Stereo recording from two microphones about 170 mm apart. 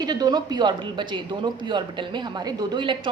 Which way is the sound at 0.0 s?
25° right (ahead or behind).